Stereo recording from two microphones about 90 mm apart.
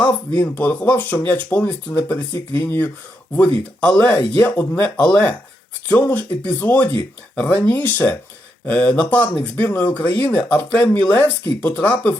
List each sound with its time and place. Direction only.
0.0 s speech: 20° left (ahead or behind)